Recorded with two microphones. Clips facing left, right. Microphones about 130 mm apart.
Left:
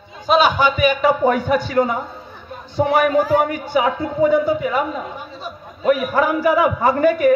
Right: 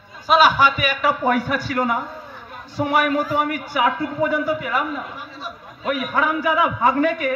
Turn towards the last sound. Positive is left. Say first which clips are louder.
# left 5 dB
turn(degrees=40)  # may be behind; listen again after turning